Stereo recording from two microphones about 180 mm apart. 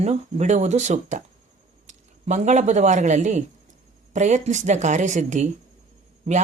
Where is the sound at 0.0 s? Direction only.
40° right (ahead or behind).